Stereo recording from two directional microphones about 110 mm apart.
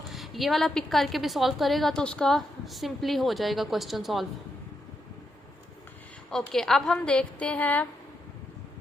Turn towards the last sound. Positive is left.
turn(degrees=15)  # may be behind; listen again after turning